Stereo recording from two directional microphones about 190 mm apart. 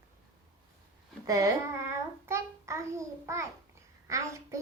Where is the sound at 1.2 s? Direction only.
20° right (ahead or behind).